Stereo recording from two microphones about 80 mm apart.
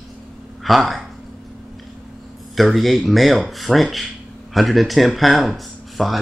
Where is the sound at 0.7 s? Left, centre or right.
Centre.